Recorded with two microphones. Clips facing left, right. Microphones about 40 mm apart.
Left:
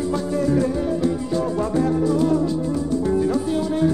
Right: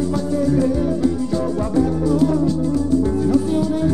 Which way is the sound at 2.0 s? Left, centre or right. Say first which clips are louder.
Right 2 dB; centre.